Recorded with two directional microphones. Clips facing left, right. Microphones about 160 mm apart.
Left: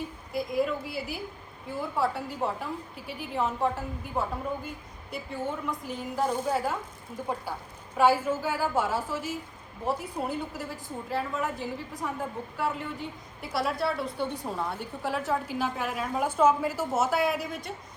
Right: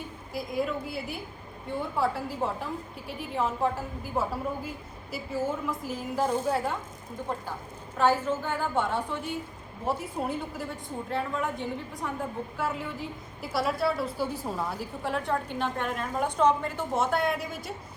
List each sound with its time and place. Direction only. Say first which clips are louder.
0.3 s a woman's voice: left 2 dB; centre (ahead or behind)